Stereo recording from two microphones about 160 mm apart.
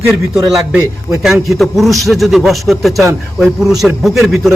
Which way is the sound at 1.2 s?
Centre (ahead or behind).